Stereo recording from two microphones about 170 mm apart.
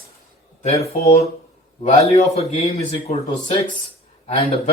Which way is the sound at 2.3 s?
35° left (ahead or behind).